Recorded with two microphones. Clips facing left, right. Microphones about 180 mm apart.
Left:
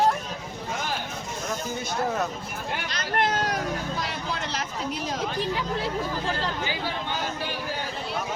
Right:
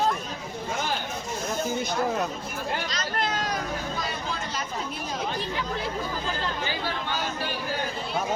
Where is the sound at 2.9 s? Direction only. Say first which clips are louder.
Left 3 dB; 60° left (ahead or behind).